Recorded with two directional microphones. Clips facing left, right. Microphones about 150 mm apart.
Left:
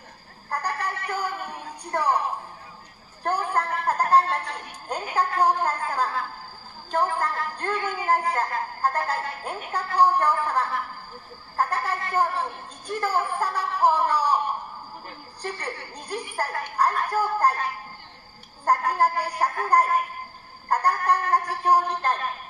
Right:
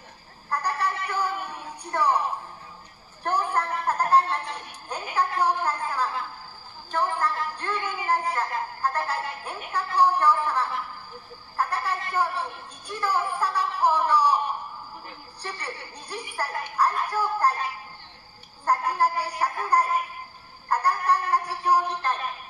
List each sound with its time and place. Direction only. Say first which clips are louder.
0.5 s music: right 2 dB; 45° left (ahead or behind)
3.3 s a sound: left 1 dB; 40° left (ahead or behind)
3.8 s a woman's voice: left 1 dB; 40° left (ahead or behind)
18.7 s a woman's voice: left 2 dB; 45° left (ahead or behind)